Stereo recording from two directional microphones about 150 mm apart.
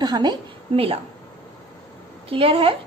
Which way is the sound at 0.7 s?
40° right (ahead or behind).